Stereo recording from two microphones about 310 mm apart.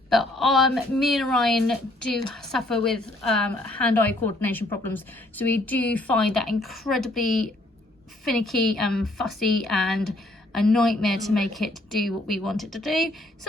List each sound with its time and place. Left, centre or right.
0.1 s a woman's voice: centre